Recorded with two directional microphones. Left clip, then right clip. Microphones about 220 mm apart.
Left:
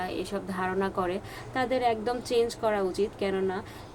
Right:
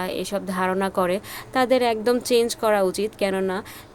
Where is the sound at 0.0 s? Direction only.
50° right (ahead or behind).